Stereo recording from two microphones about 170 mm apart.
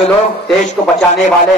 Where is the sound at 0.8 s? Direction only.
40° left (ahead or behind).